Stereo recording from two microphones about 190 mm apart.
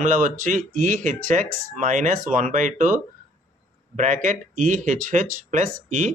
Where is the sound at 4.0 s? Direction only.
40° right (ahead or behind).